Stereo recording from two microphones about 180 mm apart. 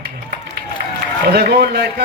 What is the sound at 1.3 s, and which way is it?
Speech, 60° right (ahead or behind).